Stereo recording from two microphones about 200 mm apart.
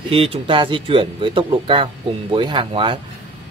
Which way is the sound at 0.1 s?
25° right (ahead or behind).